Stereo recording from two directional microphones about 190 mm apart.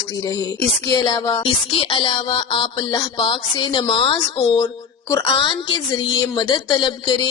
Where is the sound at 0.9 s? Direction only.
20° left (ahead or behind).